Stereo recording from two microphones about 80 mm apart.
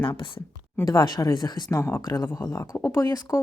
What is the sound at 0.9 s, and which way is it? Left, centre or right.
Speech, left.